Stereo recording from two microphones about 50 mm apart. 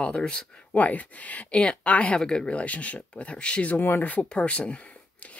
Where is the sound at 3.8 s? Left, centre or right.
Left.